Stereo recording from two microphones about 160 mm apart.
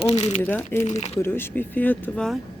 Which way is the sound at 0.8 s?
45° left (ahead or behind).